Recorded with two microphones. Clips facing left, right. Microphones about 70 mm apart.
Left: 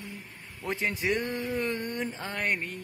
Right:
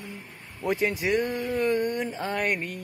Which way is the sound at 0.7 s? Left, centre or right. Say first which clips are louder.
Right 4 dB; centre.